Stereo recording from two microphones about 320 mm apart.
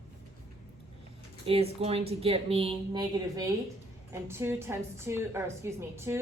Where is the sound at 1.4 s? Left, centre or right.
Centre.